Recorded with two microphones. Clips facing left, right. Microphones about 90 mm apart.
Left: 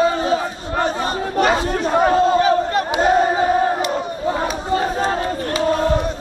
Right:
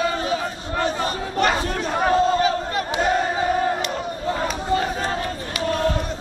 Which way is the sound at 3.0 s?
35° left (ahead or behind).